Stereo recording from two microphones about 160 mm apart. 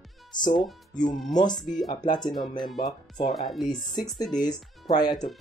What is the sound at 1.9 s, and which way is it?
Speech, 25° left (ahead or behind).